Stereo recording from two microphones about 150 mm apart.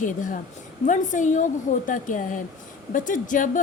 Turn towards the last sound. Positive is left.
turn(degrees=60)  # may be behind; listen again after turning